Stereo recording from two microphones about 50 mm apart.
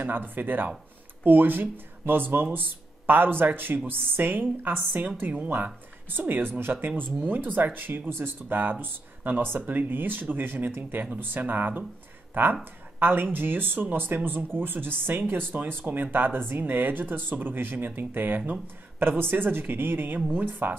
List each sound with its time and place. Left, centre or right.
0.0 s speech: right